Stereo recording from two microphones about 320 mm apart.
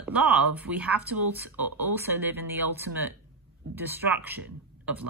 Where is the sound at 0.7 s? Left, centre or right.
Right.